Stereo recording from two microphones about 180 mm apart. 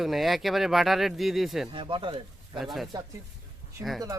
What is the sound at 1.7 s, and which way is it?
Speech, 30° right (ahead or behind).